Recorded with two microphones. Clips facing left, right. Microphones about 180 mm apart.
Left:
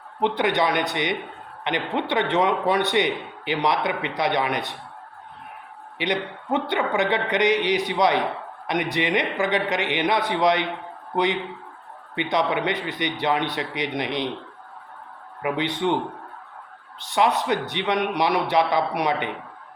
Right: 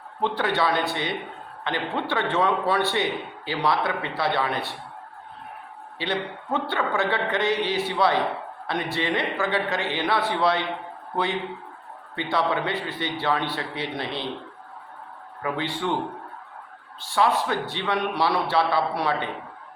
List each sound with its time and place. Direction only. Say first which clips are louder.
0.2 s a man's voice: left 3 dB; 20° left (ahead or behind)
6.0 s a man's voice: left 2 dB; 20° left (ahead or behind)
15.4 s a man's voice: left 3 dB; 15° left (ahead or behind)
17.0 s a man's voice: left 1 dB; 20° left (ahead or behind)